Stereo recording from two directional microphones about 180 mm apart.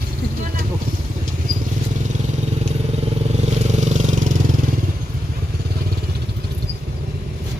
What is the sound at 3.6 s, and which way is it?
Vehicle, 40° right (ahead or behind).